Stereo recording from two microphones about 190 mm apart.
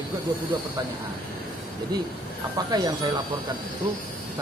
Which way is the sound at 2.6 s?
20° right (ahead or behind).